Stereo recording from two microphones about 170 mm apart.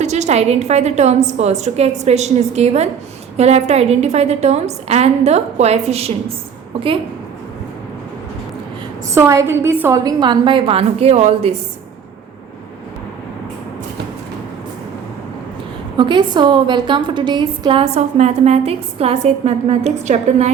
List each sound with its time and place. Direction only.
0.0 s a woman's voice: 40° right (ahead or behind)
9.1 s a woman's voice: 15° right (ahead or behind); by 11.5 s 40° right (ahead or behind)
16.0 s a woman's voice: 25° right (ahead or behind)